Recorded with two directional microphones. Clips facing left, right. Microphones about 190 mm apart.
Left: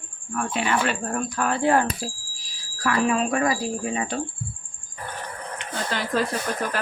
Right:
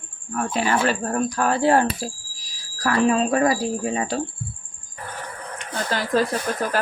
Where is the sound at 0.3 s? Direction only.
40° right (ahead or behind).